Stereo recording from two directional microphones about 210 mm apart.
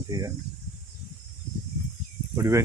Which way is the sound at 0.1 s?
15° right (ahead or behind).